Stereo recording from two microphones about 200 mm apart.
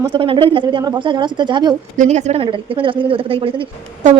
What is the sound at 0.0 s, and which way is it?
Speech, 25° right (ahead or behind).